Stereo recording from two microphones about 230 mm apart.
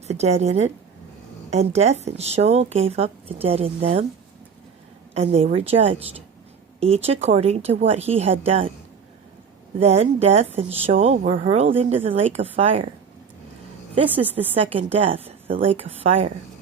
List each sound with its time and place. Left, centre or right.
0.1 s a woman's voice: right
5.1 s a woman's voice: right
9.8 s a woman's voice: right
13.9 s a woman's voice: right